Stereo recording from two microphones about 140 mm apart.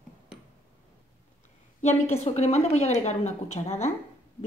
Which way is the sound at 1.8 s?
50° left (ahead or behind).